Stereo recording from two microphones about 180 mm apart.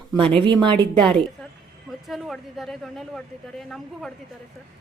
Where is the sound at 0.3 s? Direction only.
25° right (ahead or behind).